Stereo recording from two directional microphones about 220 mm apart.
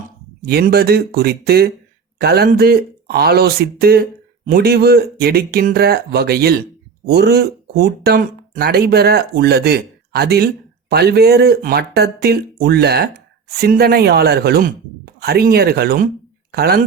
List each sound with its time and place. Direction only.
0.4 s speech: 45° right (ahead or behind)